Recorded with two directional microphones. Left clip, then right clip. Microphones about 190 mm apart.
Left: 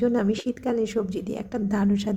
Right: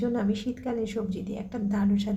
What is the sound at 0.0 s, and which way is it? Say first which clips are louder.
A woman's voice: left 5 dB; 30° left (ahead or behind).